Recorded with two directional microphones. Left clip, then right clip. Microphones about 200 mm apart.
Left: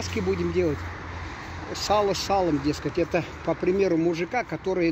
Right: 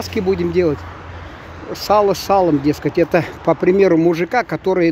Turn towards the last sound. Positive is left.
turn(degrees=-35)  # may be behind; listen again after turning